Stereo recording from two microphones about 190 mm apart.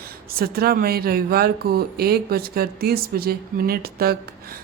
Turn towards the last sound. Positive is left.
turn(degrees=-55)  # may be behind; listen again after turning